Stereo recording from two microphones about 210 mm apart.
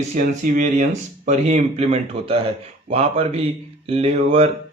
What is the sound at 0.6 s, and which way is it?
Speech, 35° right (ahead or behind).